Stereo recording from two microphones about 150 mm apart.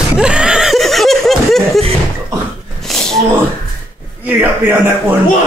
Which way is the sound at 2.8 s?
5° left (ahead or behind).